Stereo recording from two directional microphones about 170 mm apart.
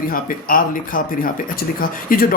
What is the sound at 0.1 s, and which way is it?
Speech, 55° left (ahead or behind).